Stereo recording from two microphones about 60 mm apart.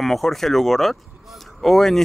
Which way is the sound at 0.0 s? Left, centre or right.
Centre.